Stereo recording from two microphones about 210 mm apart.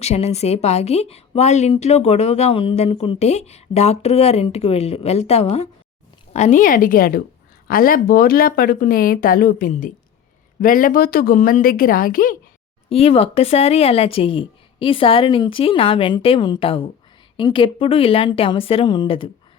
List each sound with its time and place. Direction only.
0.0 s a woman's voice: 30° left (ahead or behind)
12.9 s speech: 30° left (ahead or behind)